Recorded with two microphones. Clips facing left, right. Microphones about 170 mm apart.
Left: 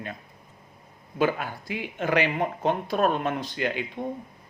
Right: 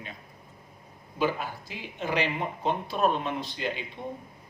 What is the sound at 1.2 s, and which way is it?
Speech, 55° left (ahead or behind).